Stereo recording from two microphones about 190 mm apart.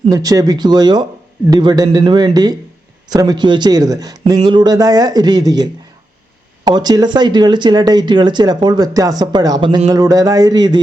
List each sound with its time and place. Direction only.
0.1 s speech: 20° right (ahead or behind)
6.7 s speech: 20° right (ahead or behind)